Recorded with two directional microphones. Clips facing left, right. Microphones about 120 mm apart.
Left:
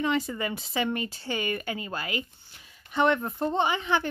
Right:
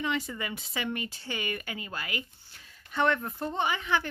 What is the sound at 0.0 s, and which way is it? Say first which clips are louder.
Speech: left 5 dB; 40° left (ahead or behind).